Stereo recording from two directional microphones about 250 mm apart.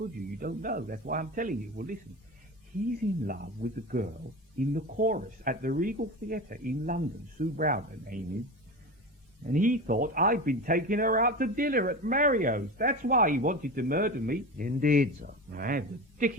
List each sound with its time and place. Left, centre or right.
0.0 s speech: right
3.2 s speech: right
9.5 s speech: right